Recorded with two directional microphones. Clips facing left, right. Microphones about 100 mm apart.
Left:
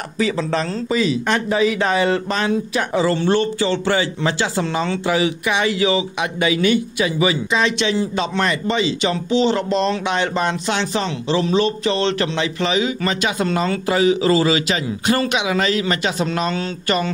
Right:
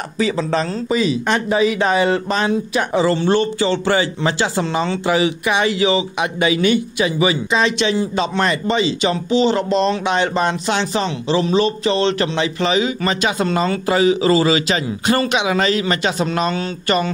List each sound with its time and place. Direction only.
0.2 s speech: 25° right (ahead or behind)